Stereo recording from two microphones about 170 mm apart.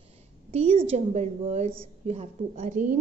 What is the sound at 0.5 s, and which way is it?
A woman's voice, 35° right (ahead or behind).